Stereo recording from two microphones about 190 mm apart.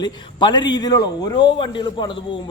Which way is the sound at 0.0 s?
25° left (ahead or behind).